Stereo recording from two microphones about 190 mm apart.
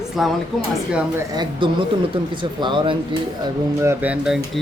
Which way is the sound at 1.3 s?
20° right (ahead or behind).